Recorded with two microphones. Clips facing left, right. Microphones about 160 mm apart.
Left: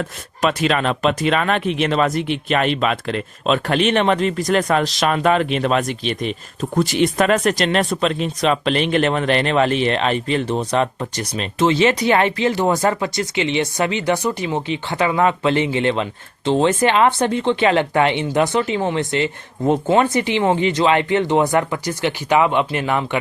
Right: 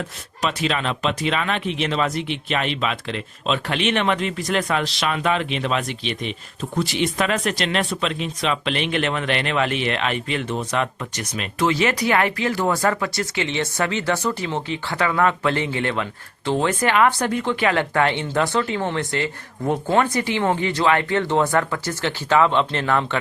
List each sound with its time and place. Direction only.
0.4 s speech: 50° left (ahead or behind); by 23.0 s 10° left (ahead or behind)